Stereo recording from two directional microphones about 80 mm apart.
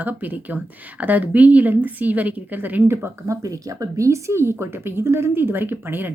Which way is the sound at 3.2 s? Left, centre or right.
Right.